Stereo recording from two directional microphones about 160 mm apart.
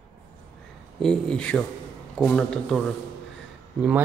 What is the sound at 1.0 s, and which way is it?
Speech, 5° left (ahead or behind).